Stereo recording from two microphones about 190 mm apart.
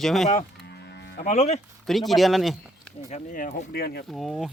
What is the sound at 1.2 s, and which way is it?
Speech, 35° left (ahead or behind).